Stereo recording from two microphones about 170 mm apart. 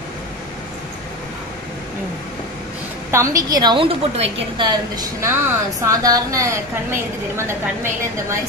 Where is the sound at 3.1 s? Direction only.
20° right (ahead or behind).